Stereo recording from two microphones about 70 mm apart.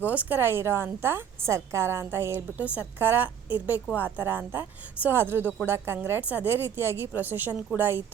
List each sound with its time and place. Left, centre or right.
0.0 s a woman's voice: right
0.3 s a woman's voice: right
2.6 s a woman's voice: centre
3.0 s a woman's voice: right